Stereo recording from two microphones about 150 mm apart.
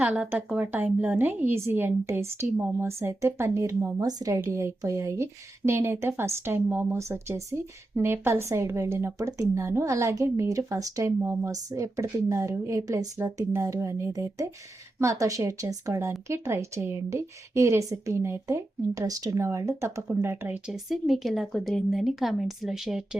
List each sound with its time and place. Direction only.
0.0 s a woman's voice: 10° right (ahead or behind)